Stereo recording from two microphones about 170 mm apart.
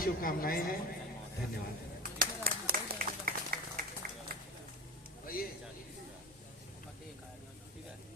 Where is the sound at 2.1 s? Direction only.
60° right (ahead or behind).